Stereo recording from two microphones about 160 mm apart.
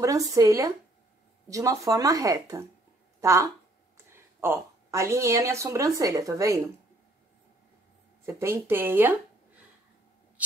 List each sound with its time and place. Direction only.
0.0 s a woman's voice: 20° right (ahead or behind)
8.3 s speech: 15° right (ahead or behind)